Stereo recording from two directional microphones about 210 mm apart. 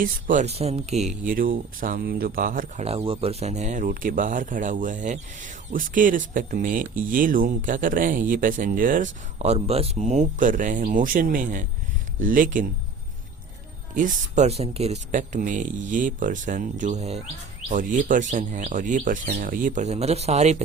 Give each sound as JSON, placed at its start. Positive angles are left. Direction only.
{"t": 0.0, "sound": "speech", "side_deg": -35}
{"t": 9.4, "sound": "speech", "side_deg": -30}
{"t": 13.9, "sound": "speech", "side_deg": -40}